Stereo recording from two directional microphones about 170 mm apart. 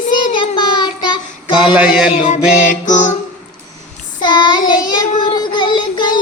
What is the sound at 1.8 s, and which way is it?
Music, 5° right (ahead or behind).